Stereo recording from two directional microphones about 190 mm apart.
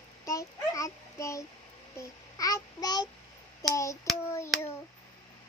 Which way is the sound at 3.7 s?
15° left (ahead or behind).